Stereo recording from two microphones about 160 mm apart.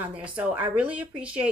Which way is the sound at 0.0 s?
10° right (ahead or behind).